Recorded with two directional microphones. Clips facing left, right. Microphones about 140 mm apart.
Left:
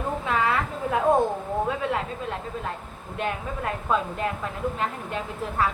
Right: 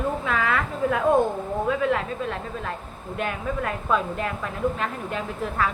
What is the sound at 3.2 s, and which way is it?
A woman's voice, 25° left (ahead or behind).